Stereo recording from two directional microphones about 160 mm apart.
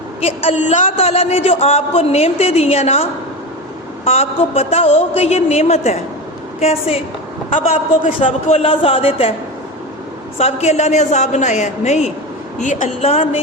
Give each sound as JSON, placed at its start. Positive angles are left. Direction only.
{"t": 0.2, "sound": "a man's voice", "side_deg": 40}
{"t": 7.5, "sound": "a man's voice", "side_deg": 50}
{"t": 8.2, "sound": "a man's voice", "side_deg": 40}
{"t": 10.3, "sound": "a man's voice", "side_deg": 40}